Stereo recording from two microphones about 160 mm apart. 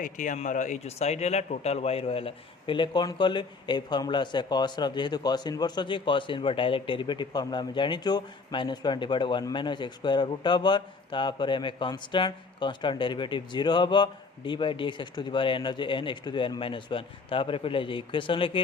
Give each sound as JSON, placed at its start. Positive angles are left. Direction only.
{"t": 0.0, "sound": "speech", "side_deg": 50}